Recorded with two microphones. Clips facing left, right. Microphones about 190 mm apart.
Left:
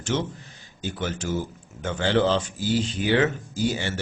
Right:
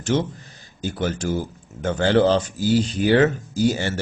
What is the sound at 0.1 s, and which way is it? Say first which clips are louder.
Speech: right 5 dB; 40° right (ahead or behind).